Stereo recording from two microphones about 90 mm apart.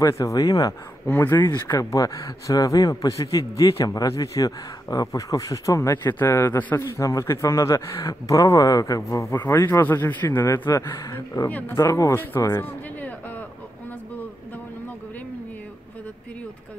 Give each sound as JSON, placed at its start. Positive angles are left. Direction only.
{"t": 0.0, "sound": "a man's voice", "side_deg": 35}
{"t": 1.0, "sound": "a man's voice", "side_deg": 25}
{"t": 1.8, "sound": "a man's voice", "side_deg": 40}
{"t": 7.0, "sound": "a man's voice", "side_deg": 35}
{"t": 11.4, "sound": "a man's voice", "side_deg": 20}
{"t": 11.7, "sound": "a man's voice", "side_deg": 35}